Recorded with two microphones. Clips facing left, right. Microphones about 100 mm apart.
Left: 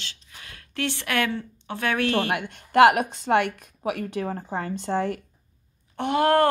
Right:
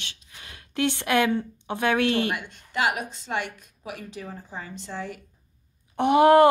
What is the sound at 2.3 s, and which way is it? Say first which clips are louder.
Speech: left 4 dB; 55° left (ahead or behind).